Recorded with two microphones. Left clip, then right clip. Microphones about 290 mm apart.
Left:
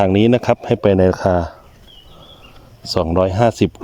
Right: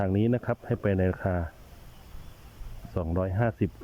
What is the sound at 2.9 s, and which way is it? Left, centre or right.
Speech, left.